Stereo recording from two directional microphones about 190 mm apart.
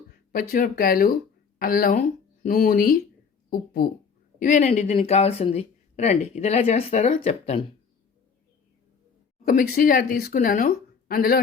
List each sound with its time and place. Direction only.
0.3 s speech: 50° left (ahead or behind)
4.4 s speech: 40° left (ahead or behind)
9.4 s speech: 45° left (ahead or behind)